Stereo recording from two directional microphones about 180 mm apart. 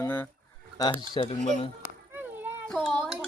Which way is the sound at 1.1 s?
30° left (ahead or behind).